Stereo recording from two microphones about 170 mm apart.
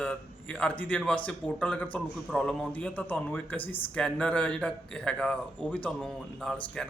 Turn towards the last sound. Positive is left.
turn(degrees=5)  # may be behind; listen again after turning